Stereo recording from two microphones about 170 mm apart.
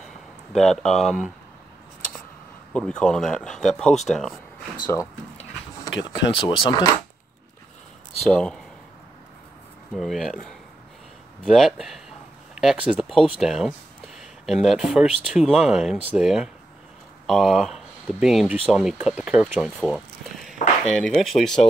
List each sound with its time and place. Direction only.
0.5 s speech: 5° left (ahead or behind)
2.7 s speech: 5° left (ahead or behind)
5.9 s speech: 90° left
6.4 s speech: 25° left (ahead or behind)
8.3 s speech: 5° left (ahead or behind)
9.9 s speech: centre (ahead or behind)
20.5 s chop: 45° left (ahead or behind)
21.0 s speech: centre (ahead or behind)